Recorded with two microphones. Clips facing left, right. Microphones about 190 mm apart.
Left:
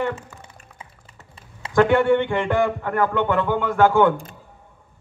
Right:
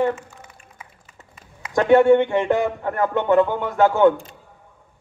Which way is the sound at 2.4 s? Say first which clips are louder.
Right 1 dB; 30° right (ahead or behind).